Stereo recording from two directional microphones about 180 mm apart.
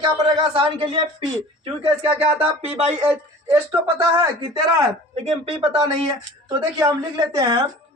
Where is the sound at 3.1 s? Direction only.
10° right (ahead or behind).